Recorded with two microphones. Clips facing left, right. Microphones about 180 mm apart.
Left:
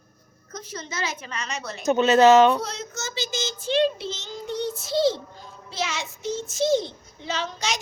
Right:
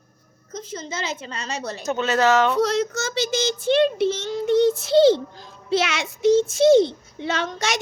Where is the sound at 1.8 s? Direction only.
20° left (ahead or behind).